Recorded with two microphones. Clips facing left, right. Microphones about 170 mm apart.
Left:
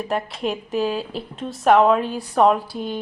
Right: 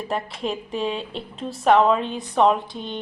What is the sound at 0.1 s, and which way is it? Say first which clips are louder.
A woman's voice: left 1 dB; centre (ahead or behind).